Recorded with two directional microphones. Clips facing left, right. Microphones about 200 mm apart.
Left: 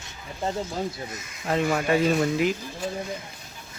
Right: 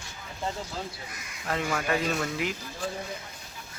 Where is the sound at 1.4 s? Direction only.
25° left (ahead or behind).